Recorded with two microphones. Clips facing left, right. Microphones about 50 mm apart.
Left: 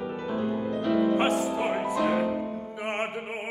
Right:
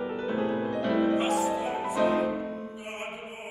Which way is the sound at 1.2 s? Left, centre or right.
Left.